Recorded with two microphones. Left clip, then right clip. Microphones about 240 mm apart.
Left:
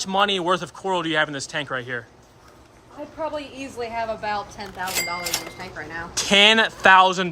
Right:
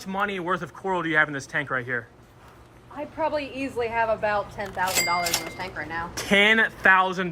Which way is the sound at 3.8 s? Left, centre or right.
Right.